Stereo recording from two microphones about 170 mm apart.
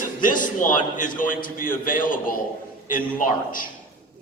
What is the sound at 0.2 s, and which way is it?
A man's voice, 50° left (ahead or behind).